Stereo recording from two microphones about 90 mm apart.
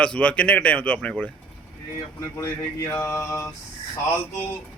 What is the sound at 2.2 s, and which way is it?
Speech, 30° left (ahead or behind).